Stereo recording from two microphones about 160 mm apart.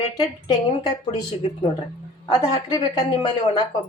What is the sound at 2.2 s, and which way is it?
Speech, 25° left (ahead or behind).